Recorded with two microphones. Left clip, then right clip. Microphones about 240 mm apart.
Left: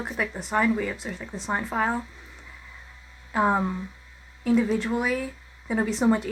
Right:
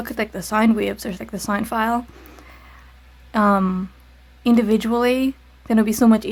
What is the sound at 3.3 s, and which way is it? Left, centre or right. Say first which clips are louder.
Speech: right 5 dB; right.